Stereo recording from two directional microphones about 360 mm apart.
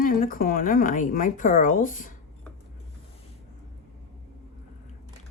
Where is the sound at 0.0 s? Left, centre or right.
Left.